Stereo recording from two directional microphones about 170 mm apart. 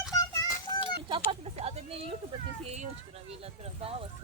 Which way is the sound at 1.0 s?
30° right (ahead or behind).